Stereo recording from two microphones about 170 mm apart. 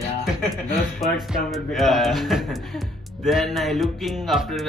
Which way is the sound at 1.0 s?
Centre (ahead or behind).